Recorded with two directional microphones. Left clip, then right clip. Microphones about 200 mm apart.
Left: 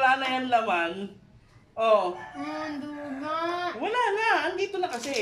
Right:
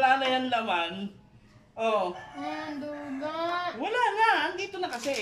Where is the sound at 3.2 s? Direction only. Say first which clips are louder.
Left 2 dB; 20° right (ahead or behind).